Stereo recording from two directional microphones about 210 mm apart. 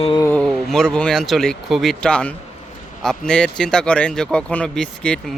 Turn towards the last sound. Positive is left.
turn(degrees=5)  # may be behind; listen again after turning